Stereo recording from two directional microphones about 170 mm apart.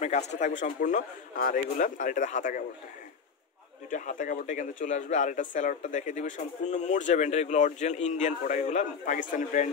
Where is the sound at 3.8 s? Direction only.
50° left (ahead or behind).